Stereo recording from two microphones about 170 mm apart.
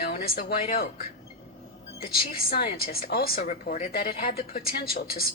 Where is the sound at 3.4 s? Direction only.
45° left (ahead or behind); by 5.2 s 60° left (ahead or behind).